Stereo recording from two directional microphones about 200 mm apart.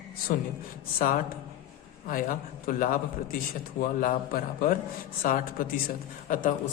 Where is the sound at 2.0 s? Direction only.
40° left (ahead or behind).